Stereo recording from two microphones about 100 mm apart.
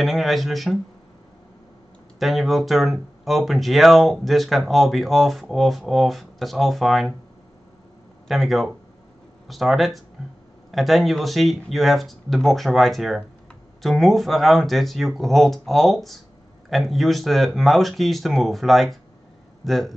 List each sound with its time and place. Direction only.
0.0 s speech: centre (ahead or behind)
2.1 s speech: centre (ahead or behind)
8.3 s speech: centre (ahead or behind)